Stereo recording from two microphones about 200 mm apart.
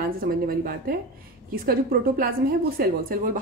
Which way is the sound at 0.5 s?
45° right (ahead or behind).